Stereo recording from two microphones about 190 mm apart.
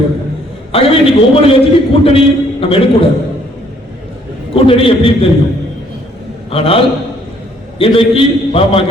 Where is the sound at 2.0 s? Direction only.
30° left (ahead or behind).